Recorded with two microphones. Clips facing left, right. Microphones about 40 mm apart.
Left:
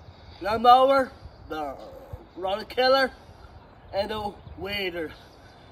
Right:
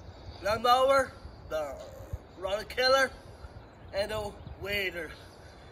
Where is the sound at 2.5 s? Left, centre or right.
Left.